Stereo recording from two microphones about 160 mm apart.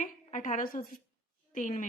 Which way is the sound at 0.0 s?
50° left (ahead or behind).